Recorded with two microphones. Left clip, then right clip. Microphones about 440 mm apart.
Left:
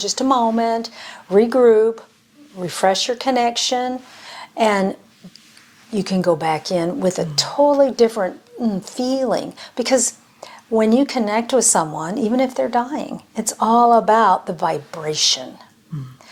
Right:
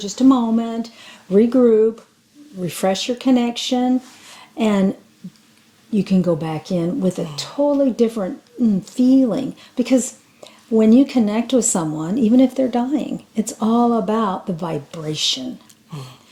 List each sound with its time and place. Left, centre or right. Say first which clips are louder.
0.0 s a woman's voice: even; left
5.9 s a woman's voice: left 1 dB; left